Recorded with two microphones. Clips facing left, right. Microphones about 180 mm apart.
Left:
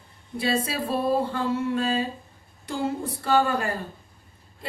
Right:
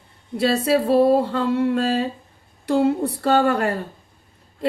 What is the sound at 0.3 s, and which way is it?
A woman's voice, 70° right (ahead or behind).